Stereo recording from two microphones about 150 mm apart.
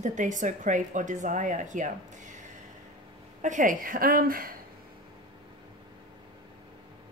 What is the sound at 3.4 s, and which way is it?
A woman's voice, 60° right (ahead or behind).